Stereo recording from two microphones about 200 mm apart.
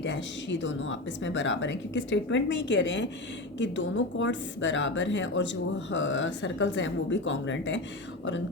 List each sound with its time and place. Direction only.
0.0 s speech: 65° left (ahead or behind)